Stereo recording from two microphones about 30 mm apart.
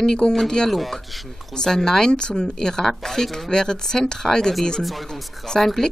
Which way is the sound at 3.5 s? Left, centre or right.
Left.